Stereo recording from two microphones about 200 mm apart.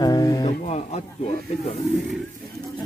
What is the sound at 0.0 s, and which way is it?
Speech, 20° left (ahead or behind).